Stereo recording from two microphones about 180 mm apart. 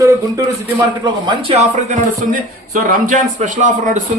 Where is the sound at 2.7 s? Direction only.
50° right (ahead or behind).